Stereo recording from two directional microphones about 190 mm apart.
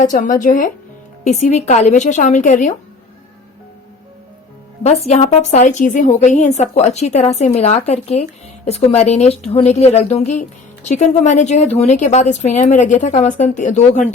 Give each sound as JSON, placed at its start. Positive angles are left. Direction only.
{"t": 0.0, "sound": "a woman's voice", "side_deg": 45}
{"t": 4.8, "sound": "a woman's voice", "side_deg": 35}